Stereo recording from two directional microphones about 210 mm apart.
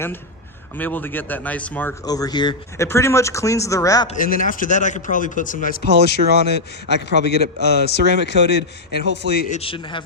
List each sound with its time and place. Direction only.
0.8 s speech: 10° left (ahead or behind)
4.1 s a man's voice: 40° left (ahead or behind)
9.5 s speech: 25° left (ahead or behind)